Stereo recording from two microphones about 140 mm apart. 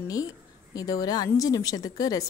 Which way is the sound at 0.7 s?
25° left (ahead or behind).